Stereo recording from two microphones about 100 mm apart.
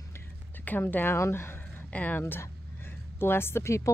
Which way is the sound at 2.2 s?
25° left (ahead or behind).